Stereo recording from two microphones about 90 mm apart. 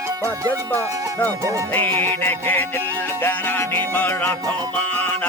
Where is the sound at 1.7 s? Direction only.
20° left (ahead or behind).